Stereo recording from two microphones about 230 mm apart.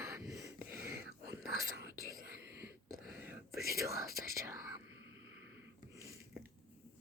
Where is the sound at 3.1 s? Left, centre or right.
Centre.